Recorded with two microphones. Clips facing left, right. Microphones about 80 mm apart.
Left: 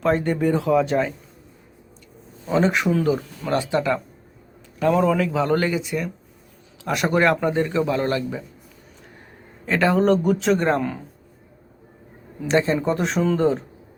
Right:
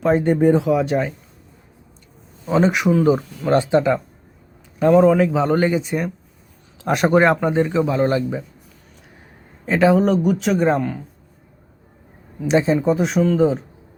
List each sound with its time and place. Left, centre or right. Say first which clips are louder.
0.0 s speech: right 5 dB; centre
2.5 s speech: right 3 dB; centre
3.0 s speech: right 5 dB; right
4.9 s speech: right 8 dB; right
6.8 s speech: right 5 dB; right
7.1 s speech: right 3 dB; right
9.6 s speech: right 3 dB; centre
12.5 s speech: right 3 dB; centre